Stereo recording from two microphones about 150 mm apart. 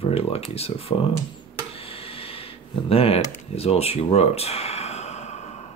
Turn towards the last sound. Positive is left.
turn(degrees=50)  # may be behind; listen again after turning